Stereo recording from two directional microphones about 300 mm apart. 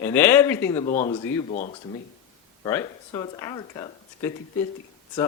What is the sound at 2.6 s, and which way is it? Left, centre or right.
Speech, centre.